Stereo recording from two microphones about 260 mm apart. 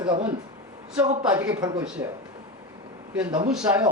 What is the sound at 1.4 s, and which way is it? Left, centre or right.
Speech, centre.